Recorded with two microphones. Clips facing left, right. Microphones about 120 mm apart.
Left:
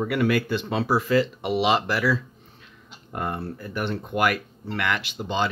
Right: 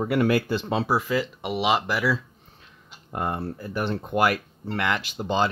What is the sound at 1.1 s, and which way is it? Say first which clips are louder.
Speech: left 4 dB; 10° right (ahead or behind).